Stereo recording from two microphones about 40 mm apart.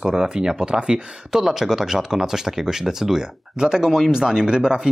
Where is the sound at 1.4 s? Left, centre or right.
Centre.